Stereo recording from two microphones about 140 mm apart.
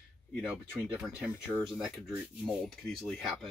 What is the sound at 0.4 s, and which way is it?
Speech, 5° right (ahead or behind).